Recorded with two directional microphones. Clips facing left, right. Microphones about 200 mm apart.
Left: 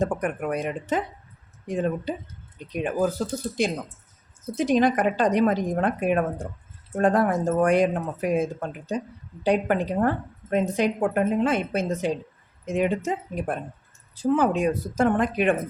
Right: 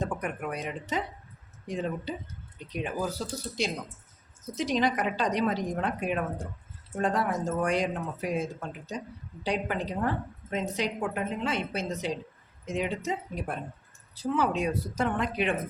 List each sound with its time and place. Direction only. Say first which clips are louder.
0.0 s a woman's voice: left 7 dB; 50° left (ahead or behind)